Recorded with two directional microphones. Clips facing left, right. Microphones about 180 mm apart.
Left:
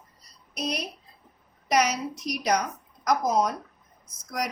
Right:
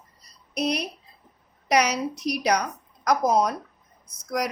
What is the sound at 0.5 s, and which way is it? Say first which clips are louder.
A woman's voice: right 5 dB; 65° right (ahead or behind).